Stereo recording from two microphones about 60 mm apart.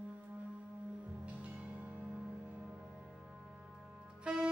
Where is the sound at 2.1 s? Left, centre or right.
Centre.